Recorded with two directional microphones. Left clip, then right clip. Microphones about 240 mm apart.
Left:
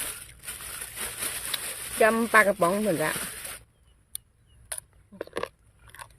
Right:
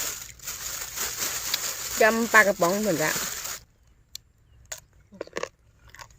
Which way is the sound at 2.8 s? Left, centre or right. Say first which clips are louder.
Right 1 dB; centre.